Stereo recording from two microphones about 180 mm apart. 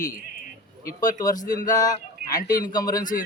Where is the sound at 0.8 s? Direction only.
20° left (ahead or behind).